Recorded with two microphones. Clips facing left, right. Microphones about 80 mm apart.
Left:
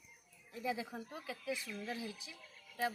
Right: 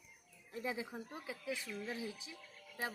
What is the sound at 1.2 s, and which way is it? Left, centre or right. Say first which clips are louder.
Speech: left 1 dB; right.